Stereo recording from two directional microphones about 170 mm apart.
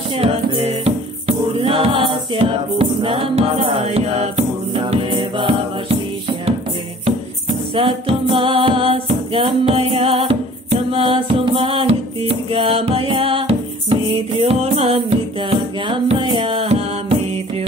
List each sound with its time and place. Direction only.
0.2 s music: 35° right (ahead or behind)
7.7 s music: 30° right (ahead or behind)